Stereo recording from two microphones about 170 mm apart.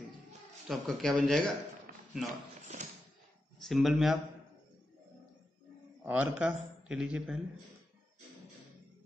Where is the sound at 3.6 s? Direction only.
Centre (ahead or behind).